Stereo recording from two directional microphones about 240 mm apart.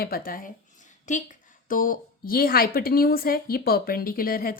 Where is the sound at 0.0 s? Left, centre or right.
Left.